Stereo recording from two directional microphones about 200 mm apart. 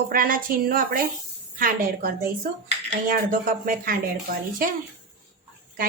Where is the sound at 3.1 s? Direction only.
45° right (ahead or behind).